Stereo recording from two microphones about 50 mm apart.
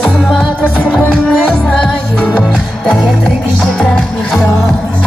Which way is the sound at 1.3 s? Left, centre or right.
Left.